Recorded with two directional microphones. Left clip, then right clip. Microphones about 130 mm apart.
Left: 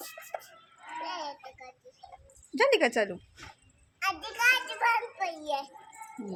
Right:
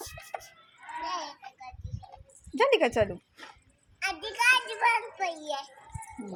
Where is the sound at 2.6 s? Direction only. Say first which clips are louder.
Right 1 dB; 5° left (ahead or behind).